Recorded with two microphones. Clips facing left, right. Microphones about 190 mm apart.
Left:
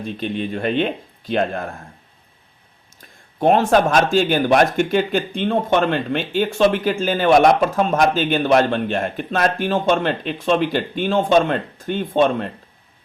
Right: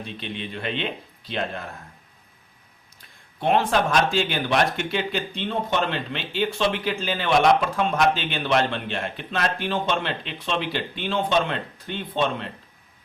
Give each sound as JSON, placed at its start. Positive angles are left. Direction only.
{"t": 0.0, "sound": "speech", "side_deg": 45}
{"t": 3.0, "sound": "speech", "side_deg": 45}